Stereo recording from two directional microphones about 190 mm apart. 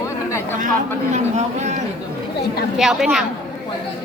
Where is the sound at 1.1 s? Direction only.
35° right (ahead or behind).